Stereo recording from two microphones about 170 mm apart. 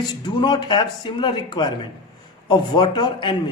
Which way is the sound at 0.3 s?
25° left (ahead or behind).